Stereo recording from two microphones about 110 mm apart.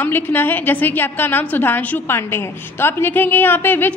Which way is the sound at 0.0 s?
20° left (ahead or behind).